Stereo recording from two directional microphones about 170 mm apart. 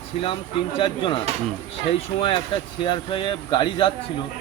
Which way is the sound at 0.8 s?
30° left (ahead or behind).